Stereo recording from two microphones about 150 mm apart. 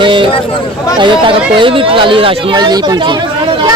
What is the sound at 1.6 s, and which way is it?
Speech, 35° right (ahead or behind).